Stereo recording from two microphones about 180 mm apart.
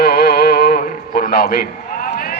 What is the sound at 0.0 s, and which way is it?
Music, 60° left (ahead or behind).